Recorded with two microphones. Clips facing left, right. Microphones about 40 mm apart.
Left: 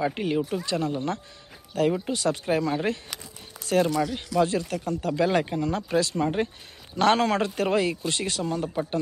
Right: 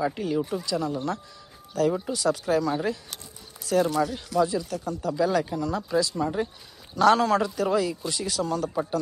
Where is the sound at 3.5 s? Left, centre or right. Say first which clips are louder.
Even; left.